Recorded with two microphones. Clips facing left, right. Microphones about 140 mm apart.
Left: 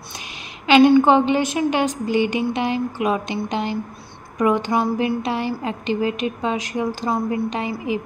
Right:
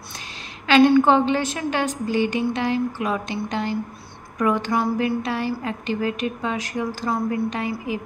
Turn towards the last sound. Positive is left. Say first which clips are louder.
# left 2 dB
turn(degrees=20)  # may be behind; listen again after turning